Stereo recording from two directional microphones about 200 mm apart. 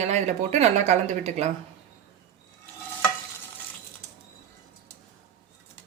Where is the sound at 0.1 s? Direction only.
35° right (ahead or behind).